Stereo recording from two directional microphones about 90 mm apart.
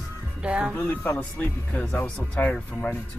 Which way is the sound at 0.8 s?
15° left (ahead or behind).